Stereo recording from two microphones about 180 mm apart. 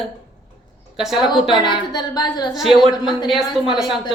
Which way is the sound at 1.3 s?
25° left (ahead or behind).